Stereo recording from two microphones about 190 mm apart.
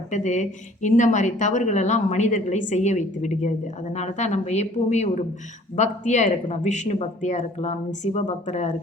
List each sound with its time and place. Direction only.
0.1 s a woman's voice: 35° left (ahead or behind)